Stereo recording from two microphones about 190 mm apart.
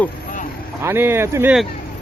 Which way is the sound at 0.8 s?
10° right (ahead or behind).